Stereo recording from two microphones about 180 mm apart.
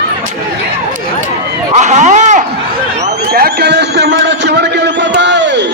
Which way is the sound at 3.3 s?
55° right (ahead or behind).